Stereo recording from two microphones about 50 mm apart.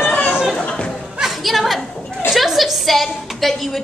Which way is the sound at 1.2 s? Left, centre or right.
Centre.